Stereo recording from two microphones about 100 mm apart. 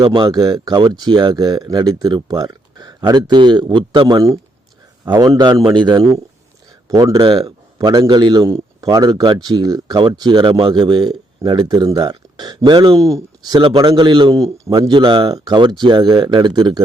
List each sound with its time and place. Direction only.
0.0 s speech: 50° right (ahead or behind)
5.2 s speech: 40° right (ahead or behind)
6.8 s a man's voice: 40° right (ahead or behind)
13.0 s speech: 35° right (ahead or behind); by 14.3 s 50° right (ahead or behind)
14.3 s speech: 40° right (ahead or behind)